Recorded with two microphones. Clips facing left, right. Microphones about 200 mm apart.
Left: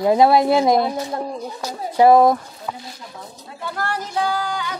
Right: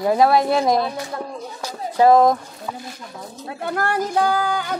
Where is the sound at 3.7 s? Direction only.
50° right (ahead or behind).